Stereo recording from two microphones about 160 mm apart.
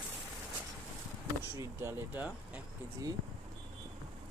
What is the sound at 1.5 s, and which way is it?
Speech, 15° right (ahead or behind).